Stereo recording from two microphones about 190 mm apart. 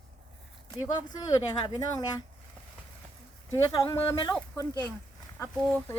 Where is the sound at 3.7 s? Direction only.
15° left (ahead or behind).